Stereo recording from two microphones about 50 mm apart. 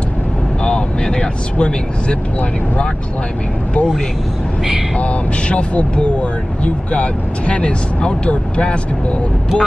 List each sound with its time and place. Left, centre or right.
0.7 s vehicle: centre
4.9 s speech: left